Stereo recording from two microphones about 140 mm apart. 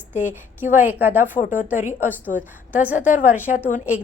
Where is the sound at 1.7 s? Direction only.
60° left (ahead or behind).